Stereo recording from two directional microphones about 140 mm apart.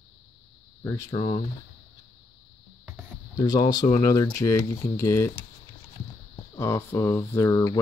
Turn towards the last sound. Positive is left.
turn(degrees=20)  # may be behind; listen again after turning